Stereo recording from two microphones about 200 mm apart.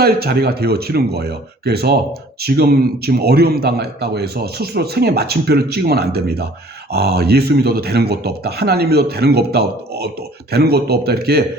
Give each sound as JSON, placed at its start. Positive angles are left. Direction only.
{"t": 0.0, "sound": "a man's voice", "side_deg": -50}